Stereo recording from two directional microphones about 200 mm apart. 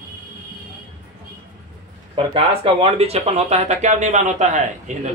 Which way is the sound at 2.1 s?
25° right (ahead or behind).